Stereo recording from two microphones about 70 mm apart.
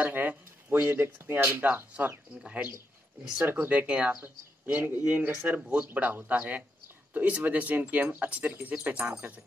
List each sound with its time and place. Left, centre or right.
0.0 s speech: right